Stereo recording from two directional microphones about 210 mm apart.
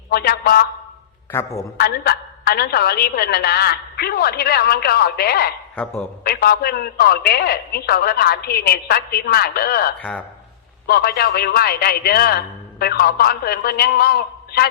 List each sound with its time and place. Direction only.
0.1 s a woman's voice: 45° left (ahead or behind)
1.3 s a man's voice: 15° left (ahead or behind)
1.8 s a woman's voice: 45° left (ahead or behind)
5.7 s a man's voice: 5° left (ahead or behind)
6.2 s a woman's voice: 50° left (ahead or behind)
10.0 s a man's voice: 5° left (ahead or behind)
10.8 s a woman's voice: 50° left (ahead or behind)